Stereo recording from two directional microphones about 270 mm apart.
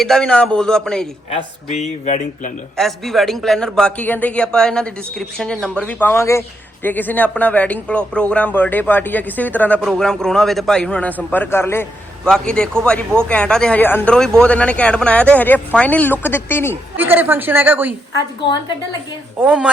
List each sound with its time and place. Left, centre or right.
0.0 s a man's voice: centre
1.3 s speech: left
2.7 s a man's voice: centre
17.0 s a woman's voice: centre
19.4 s a man's voice: centre